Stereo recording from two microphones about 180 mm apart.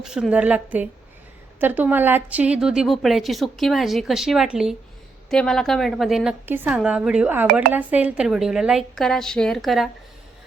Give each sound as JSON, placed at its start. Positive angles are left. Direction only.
{"t": 0.0, "sound": "a woman's voice", "side_deg": -5}